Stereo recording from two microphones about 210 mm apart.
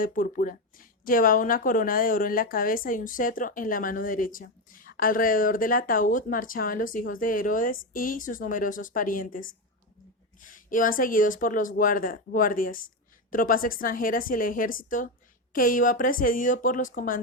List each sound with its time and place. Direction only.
0.0 s speech: 40° left (ahead or behind)